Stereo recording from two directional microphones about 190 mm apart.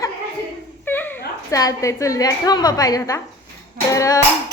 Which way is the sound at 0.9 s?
10° left (ahead or behind).